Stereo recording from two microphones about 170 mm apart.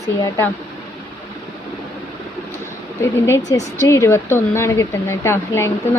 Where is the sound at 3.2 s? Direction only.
15° left (ahead or behind).